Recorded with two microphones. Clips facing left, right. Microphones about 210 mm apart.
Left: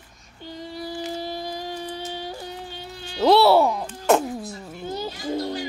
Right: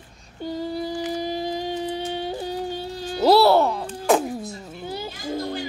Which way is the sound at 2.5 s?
35° right (ahead or behind).